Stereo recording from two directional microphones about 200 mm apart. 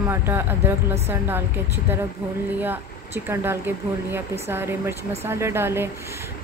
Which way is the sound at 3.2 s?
10° right (ahead or behind).